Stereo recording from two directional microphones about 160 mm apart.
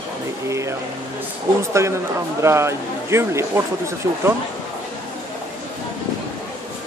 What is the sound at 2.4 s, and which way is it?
Speech, 15° right (ahead or behind).